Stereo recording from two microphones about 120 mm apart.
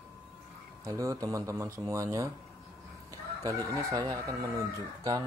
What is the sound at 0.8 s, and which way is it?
Speech, 25° right (ahead or behind).